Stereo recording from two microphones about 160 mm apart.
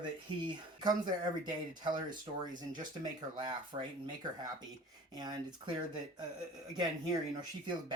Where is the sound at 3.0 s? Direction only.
30° right (ahead or behind).